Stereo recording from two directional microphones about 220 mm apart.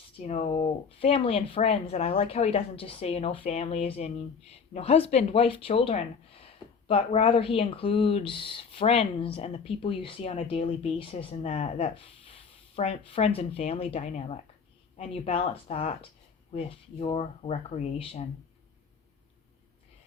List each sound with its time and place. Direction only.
0.2 s speech: 30° left (ahead or behind)